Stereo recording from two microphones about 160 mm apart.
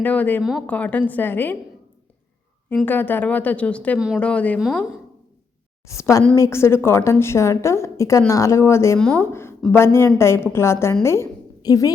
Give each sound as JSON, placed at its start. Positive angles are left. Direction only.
{"t": 0.0, "sound": "a woman's voice", "side_deg": 10}
{"t": 2.8, "sound": "a woman's voice", "side_deg": 10}
{"t": 3.9, "sound": "speech", "side_deg": -5}
{"t": 4.2, "sound": "a woman's voice", "side_deg": 10}
{"t": 5.8, "sound": "a woman's voice", "side_deg": 20}